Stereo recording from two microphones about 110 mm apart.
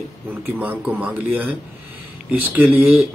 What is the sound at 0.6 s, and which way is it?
A man's voice, 15° right (ahead or behind).